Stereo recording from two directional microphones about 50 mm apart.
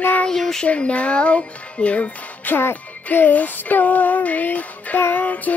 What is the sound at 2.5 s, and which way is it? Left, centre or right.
Music, left.